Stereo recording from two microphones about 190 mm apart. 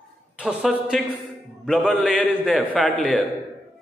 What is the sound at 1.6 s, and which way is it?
Music, centre (ahead or behind).